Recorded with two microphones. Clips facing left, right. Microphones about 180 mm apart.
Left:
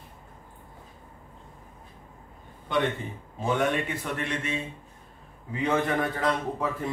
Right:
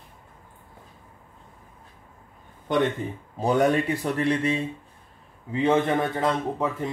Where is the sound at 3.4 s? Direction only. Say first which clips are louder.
Right 5 dB; 40° right (ahead or behind).